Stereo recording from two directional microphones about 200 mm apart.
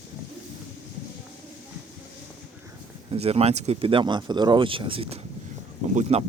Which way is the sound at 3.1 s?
30° right (ahead or behind).